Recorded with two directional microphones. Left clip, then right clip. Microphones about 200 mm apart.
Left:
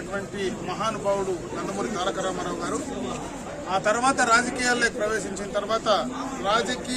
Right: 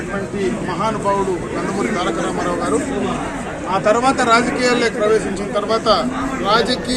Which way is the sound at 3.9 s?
10° left (ahead or behind).